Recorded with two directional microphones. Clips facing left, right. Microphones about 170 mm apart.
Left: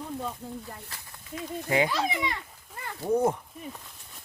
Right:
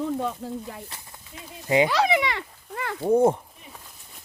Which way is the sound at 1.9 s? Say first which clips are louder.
Right 7 dB; 80° right.